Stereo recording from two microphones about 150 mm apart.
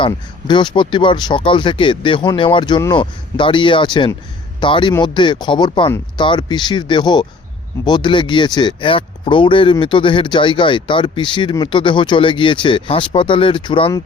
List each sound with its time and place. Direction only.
0.1 s speech: 30° left (ahead or behind)